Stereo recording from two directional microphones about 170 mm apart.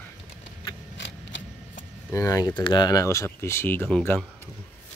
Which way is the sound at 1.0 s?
90° left.